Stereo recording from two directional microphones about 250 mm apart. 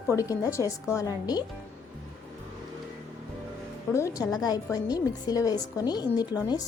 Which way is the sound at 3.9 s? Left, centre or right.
Centre.